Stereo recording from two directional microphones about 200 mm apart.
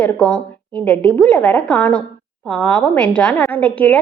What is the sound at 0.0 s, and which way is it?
A woman's voice, 5° left (ahead or behind).